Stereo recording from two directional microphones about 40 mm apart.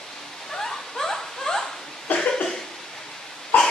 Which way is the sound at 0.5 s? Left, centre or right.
Centre.